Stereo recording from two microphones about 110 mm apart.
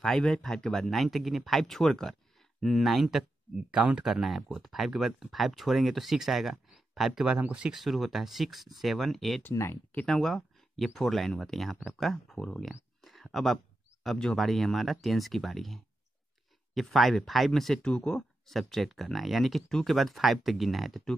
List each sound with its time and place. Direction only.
0.0 s speech: 5° left (ahead or behind)
9.4 s speech: 25° left (ahead or behind)
9.9 s speech: 5° left (ahead or behind)